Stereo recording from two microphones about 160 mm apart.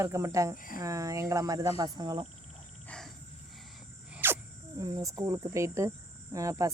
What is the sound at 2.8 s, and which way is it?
Wild animals, 5° left (ahead or behind).